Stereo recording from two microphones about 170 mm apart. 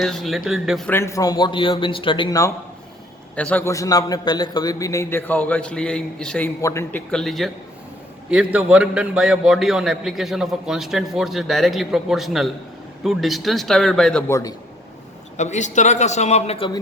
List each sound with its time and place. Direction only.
0.0 s a man's voice: centre (ahead or behind)
0.9 s a man's voice: 15° left (ahead or behind)
3.3 s a man's voice: 10° left (ahead or behind)
6.6 s a man's voice: 15° left (ahead or behind)
7.1 s a man's voice: centre (ahead or behind)
8.5 s a man's voice: 5° right (ahead or behind)
14.3 s a man's voice: 15° left (ahead or behind)
15.4 s a man's voice: 45° left (ahead or behind)